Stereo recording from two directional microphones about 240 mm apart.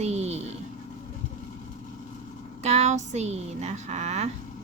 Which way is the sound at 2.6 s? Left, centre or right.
Right.